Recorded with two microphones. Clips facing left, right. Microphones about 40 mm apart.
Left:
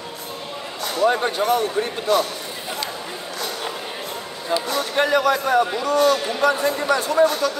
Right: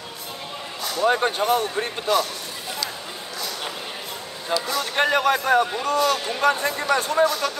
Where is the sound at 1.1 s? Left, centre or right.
Right.